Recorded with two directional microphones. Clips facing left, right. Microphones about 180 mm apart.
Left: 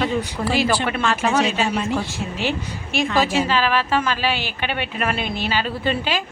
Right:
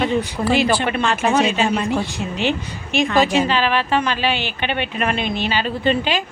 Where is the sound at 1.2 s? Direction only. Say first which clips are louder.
Right 3 dB; 55° right (ahead or behind).